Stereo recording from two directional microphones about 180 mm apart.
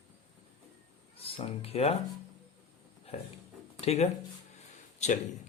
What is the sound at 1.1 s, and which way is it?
Speech, 30° left (ahead or behind).